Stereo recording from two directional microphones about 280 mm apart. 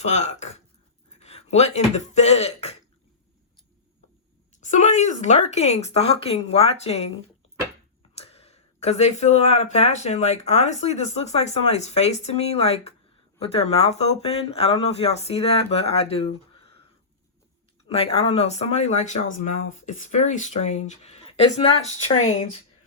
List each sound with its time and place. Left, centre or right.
0.0 s speech: left
4.6 s speech: left
8.1 s speech: left
17.8 s speech: left